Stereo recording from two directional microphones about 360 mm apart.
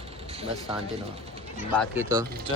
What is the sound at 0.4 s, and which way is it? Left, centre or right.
Speech, centre.